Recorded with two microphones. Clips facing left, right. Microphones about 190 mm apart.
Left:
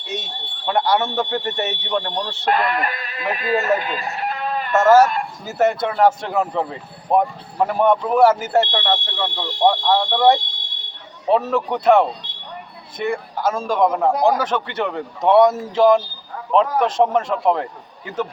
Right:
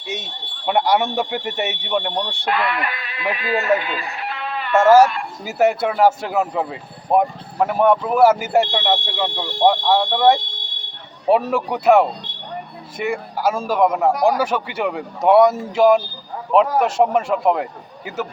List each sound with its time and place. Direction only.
0.6 s speech: 15° right (ahead or behind)
2.4 s speech: 45° left (ahead or behind)
5.5 s speech: 10° right (ahead or behind)
14.1 s a man's voice: 25° left (ahead or behind)
14.3 s speech: 10° right (ahead or behind)